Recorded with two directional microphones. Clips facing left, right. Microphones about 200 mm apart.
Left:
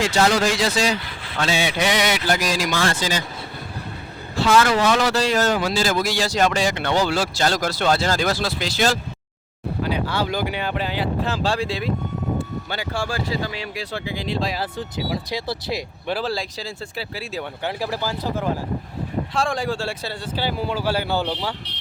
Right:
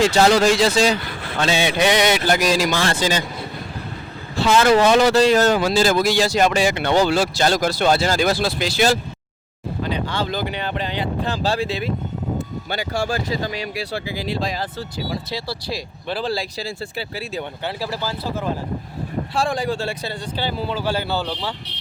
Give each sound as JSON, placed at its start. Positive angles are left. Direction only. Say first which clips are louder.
{"t": 0.0, "sound": "speech", "louder": "right 4 dB", "side_deg": -30}
{"t": 4.4, "sound": "speech", "louder": "right 3 dB", "side_deg": -25}
{"t": 6.2, "sound": "speech", "louder": "right 3 dB", "side_deg": -10}
{"t": 9.8, "sound": "speech", "louder": "left 1 dB", "side_deg": 10}
{"t": 12.8, "sound": "speech", "louder": "right 4 dB", "side_deg": -40}
{"t": 13.7, "sound": "speech", "louder": "right 2 dB", "side_deg": -10}
{"t": 14.8, "sound": "speech", "louder": "left 1 dB", "side_deg": 15}
{"t": 16.1, "sound": "speech", "louder": "right 2 dB", "side_deg": 0}
{"t": 17.6, "sound": "speech", "louder": "left 3 dB", "side_deg": 15}
{"t": 19.3, "sound": "speech", "louder": "right 2 dB", "side_deg": -5}